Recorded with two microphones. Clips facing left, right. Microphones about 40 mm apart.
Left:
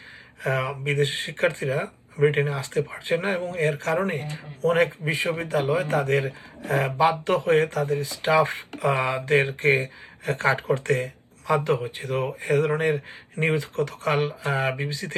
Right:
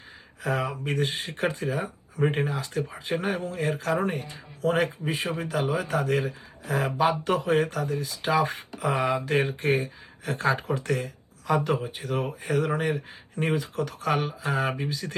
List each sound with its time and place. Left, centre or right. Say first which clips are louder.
0.4 s speech: left 3 dB; left